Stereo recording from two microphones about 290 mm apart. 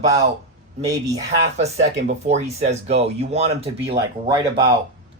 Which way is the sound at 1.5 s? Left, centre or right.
Right.